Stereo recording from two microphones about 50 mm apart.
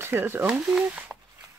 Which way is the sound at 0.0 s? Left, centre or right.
Right.